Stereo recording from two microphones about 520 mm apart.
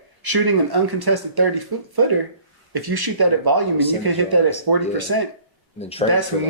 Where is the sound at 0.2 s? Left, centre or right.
Right.